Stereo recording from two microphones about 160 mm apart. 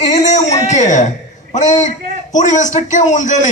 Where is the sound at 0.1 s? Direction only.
45° left (ahead or behind).